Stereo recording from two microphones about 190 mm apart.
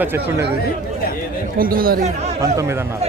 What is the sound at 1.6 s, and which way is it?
Speech, 50° right (ahead or behind).